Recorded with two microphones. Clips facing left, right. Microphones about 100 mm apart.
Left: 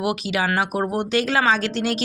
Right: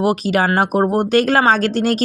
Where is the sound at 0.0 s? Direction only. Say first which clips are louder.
Right 7 dB; 40° right (ahead or behind).